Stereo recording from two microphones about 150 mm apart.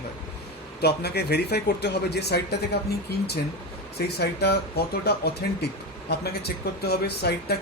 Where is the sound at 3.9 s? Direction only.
90° left.